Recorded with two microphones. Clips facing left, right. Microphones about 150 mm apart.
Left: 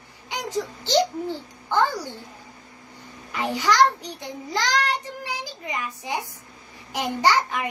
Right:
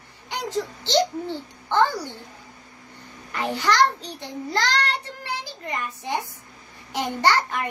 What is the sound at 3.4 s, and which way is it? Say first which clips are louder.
A child's voice: left 1 dB; 15° left (ahead or behind).